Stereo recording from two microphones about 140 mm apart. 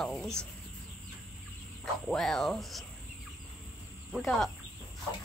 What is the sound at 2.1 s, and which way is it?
Speech, centre (ahead or behind).